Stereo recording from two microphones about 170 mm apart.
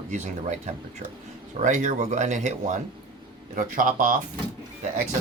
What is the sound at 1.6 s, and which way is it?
Speech, 45° right (ahead or behind).